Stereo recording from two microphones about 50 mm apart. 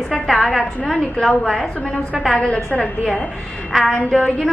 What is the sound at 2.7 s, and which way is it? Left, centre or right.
A woman's voice, left.